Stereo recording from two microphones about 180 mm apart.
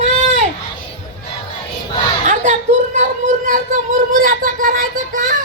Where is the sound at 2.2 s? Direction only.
45° right (ahead or behind).